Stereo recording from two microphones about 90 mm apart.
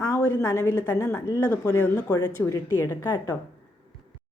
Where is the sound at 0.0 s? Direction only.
35° left (ahead or behind).